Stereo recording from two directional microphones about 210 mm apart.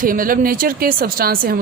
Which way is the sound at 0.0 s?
40° right (ahead or behind).